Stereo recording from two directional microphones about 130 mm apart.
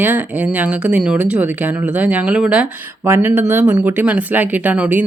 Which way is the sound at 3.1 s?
15° right (ahead or behind).